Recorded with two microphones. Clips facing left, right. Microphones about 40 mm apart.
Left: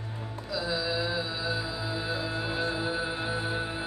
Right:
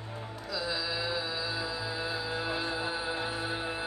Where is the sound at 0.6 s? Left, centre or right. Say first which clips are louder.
Left 4 dB; centre.